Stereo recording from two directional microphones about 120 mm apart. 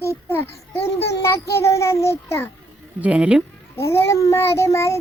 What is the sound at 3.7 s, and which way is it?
A child's voice, 20° left (ahead or behind).